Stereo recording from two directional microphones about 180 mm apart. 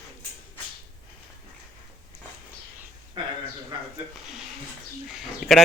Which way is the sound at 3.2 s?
25° right (ahead or behind).